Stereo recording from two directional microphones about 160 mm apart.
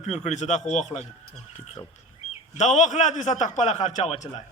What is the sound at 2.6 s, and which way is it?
A man's voice, 50° left (ahead or behind).